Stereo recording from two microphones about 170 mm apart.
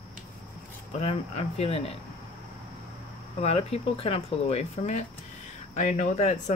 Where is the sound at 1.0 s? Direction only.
35° left (ahead or behind).